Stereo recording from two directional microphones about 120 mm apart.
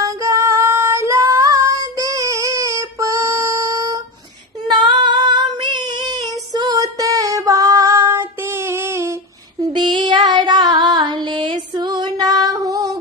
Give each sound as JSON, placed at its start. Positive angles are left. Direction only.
{"t": 0.0, "sound": "female singing", "side_deg": -25}
{"t": 9.7, "sound": "female singing", "side_deg": -40}